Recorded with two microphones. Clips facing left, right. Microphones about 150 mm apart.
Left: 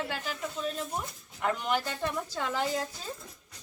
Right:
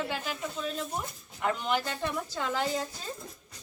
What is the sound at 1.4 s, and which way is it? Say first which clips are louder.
Speech: even; 5° left (ahead or behind).